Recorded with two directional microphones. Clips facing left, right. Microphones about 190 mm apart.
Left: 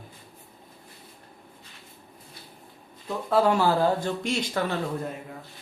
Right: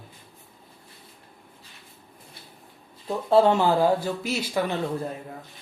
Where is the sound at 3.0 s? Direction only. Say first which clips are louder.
Right 4 dB; 30° right (ahead or behind); by 4.6 s 5° right (ahead or behind).